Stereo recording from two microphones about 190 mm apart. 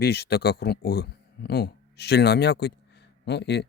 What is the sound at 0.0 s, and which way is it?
Speech, 55° left (ahead or behind).